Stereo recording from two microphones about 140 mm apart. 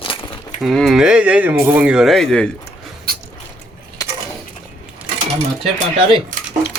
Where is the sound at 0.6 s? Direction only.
Centre (ahead or behind).